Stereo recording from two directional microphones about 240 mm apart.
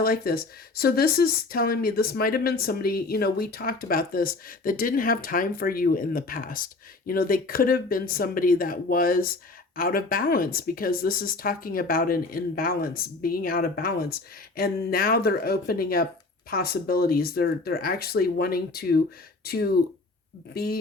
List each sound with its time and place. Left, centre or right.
0.0 s speech: left